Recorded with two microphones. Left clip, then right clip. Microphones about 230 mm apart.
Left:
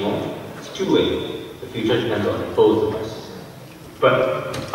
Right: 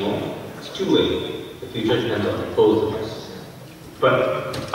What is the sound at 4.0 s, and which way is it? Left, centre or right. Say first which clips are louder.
Speech: left 1 dB; centre.